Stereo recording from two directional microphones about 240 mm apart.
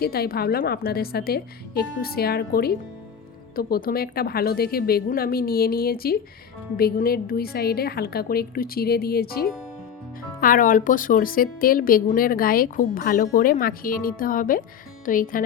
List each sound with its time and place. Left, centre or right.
0.0 s a woman's voice: left